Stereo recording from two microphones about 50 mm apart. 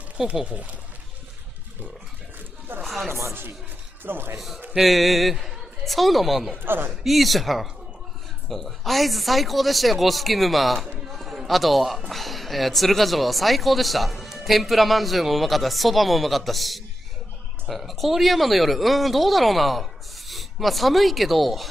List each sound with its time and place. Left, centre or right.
0.3 s speech: right
2.8 s a sound: centre
4.0 s speech: right
4.7 s a man's voice: centre
6.6 s speech: right
6.9 s speech: centre
11.1 s a sound: centre
12.1 s speech: centre